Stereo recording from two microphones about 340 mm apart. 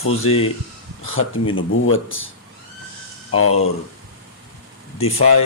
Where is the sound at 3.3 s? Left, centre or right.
Left.